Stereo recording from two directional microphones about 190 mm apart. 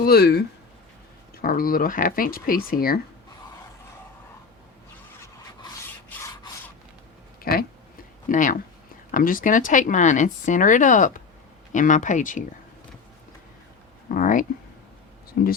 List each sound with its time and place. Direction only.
0.0 s speech: 55° left (ahead or behind)
5.2 s rub: 15° left (ahead or behind)
7.5 s a sound: 50° left (ahead or behind)
8.3 s speech: 45° left (ahead or behind)
14.1 s speech: 45° left (ahead or behind)
15.3 s speech: 55° left (ahead or behind)